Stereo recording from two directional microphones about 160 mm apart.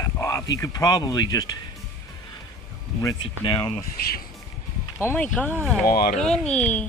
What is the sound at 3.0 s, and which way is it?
Speech, 30° left (ahead or behind).